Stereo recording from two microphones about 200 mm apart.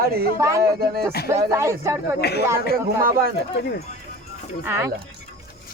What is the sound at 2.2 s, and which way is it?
Speech, 55° left (ahead or behind).